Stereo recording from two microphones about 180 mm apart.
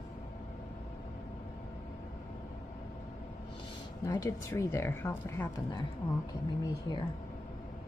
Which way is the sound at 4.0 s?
20° left (ahead or behind).